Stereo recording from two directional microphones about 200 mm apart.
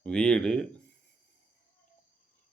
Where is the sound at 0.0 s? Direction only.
5° left (ahead or behind).